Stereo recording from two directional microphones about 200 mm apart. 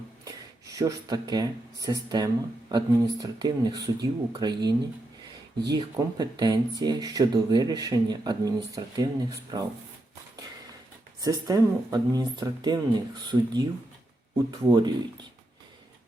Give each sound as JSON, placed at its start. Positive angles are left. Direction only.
{"t": 0.3, "sound": "speech", "side_deg": -15}
{"t": 11.2, "sound": "speech", "side_deg": -20}